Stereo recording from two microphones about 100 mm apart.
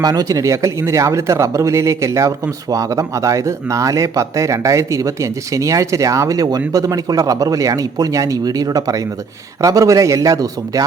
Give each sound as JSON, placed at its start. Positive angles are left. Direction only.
{"t": 0.0, "sound": "speech", "side_deg": -40}